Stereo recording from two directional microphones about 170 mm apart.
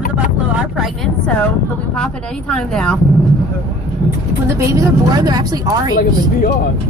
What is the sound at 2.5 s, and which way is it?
Speech, 5° left (ahead or behind).